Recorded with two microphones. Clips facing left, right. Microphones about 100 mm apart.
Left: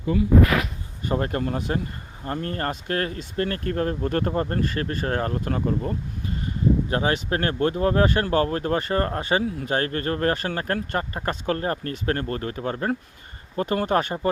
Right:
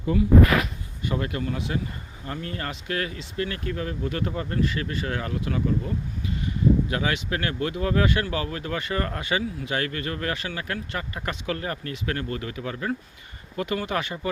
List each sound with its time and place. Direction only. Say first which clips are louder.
1.0 s speech: left 3 dB; 40° left (ahead or behind)